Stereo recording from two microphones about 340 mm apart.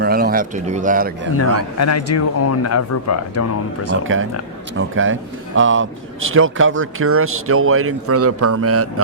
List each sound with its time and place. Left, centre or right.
0.0 s speech: right
1.8 s speech: left
4.0 s speech: right